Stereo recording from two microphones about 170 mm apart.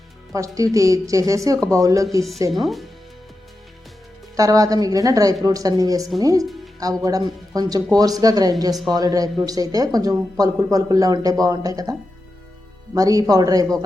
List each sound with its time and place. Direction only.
0.3 s speech: 20° right (ahead or behind)
2.5 s speech: centre (ahead or behind)
4.4 s speech: 20° right (ahead or behind)